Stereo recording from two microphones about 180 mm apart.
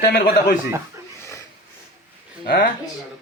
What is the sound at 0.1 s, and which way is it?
Speech, 55° left (ahead or behind).